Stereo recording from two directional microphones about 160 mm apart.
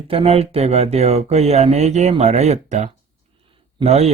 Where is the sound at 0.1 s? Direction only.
35° right (ahead or behind).